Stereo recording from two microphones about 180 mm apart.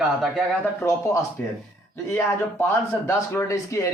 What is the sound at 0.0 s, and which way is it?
Speech, centre (ahead or behind).